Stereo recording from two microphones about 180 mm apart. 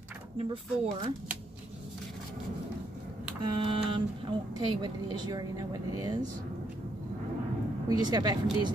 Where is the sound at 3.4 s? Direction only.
30° right (ahead or behind).